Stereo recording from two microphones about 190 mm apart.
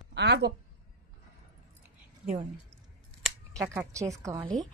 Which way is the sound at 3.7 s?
15° right (ahead or behind).